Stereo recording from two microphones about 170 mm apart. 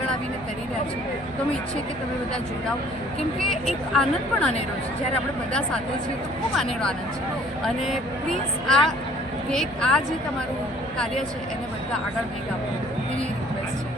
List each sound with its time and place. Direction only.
3.5 s a woman's voice: centre (ahead or behind)
7.9 s a woman's voice: centre (ahead or behind)